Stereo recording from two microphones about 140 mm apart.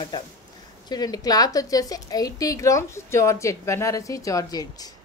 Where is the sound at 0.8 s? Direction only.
30° left (ahead or behind).